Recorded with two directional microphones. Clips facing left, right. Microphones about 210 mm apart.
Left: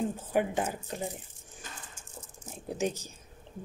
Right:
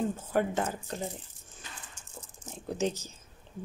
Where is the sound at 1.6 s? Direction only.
45° left (ahead or behind).